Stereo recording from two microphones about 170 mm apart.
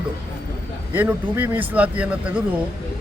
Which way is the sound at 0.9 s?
10° right (ahead or behind).